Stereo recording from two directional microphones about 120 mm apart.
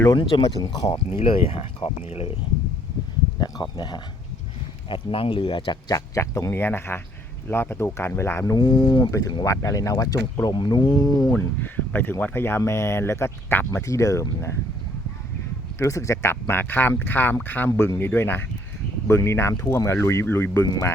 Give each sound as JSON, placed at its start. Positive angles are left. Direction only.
{"t": 0.4, "sound": "speech", "side_deg": 30}
{"t": 0.9, "sound": "speech", "side_deg": 50}
{"t": 3.4, "sound": "speech", "side_deg": 35}
{"t": 4.9, "sound": "speech", "side_deg": 45}
{"t": 5.9, "sound": "speech", "side_deg": 25}
{"t": 8.5, "sound": "speech", "side_deg": 40}
{"t": 11.3, "sound": "speech", "side_deg": 15}
{"t": 15.8, "sound": "speech", "side_deg": 25}